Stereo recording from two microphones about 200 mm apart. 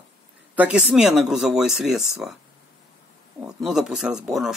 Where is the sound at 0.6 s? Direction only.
5° right (ahead or behind).